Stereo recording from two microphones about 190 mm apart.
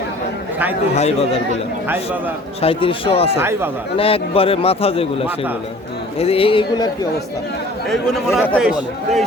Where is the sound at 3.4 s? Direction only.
15° right (ahead or behind).